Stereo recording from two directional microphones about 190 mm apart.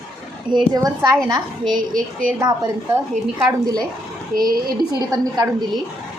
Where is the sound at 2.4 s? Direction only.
20° right (ahead or behind).